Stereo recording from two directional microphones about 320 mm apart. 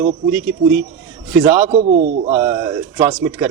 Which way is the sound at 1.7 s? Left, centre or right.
Right.